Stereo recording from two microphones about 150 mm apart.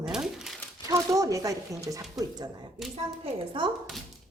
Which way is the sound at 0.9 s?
20° right (ahead or behind).